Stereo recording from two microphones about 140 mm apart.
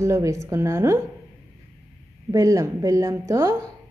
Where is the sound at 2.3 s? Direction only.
25° right (ahead or behind).